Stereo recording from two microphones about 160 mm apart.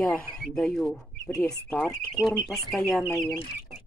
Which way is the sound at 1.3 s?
20° left (ahead or behind).